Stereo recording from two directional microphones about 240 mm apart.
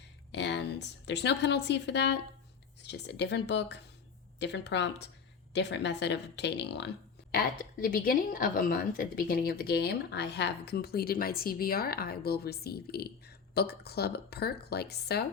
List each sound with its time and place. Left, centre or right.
0.3 s a woman's voice: left